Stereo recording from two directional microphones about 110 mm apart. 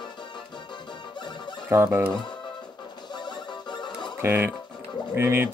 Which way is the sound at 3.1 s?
45° left (ahead or behind).